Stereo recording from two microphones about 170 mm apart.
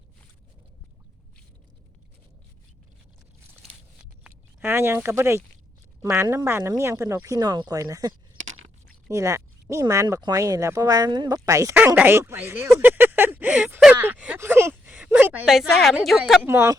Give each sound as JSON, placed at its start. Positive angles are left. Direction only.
{"t": 4.2, "sound": "speech", "side_deg": -15}
{"t": 16.5, "sound": "speech", "side_deg": -15}